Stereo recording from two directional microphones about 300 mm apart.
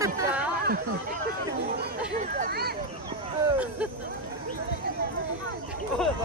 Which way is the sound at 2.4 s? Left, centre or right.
Right.